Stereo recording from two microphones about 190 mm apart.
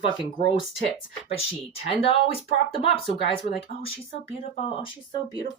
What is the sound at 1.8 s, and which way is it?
Speech, 30° left (ahead or behind).